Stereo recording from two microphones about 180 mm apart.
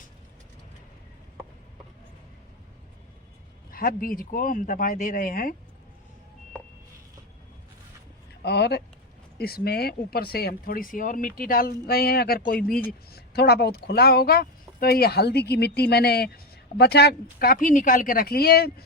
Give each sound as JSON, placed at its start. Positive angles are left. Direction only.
{"t": 3.7, "sound": "speech", "side_deg": 55}
{"t": 8.4, "sound": "speech", "side_deg": 70}